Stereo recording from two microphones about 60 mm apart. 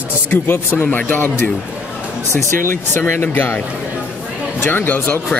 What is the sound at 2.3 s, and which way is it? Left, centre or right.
Speech, left.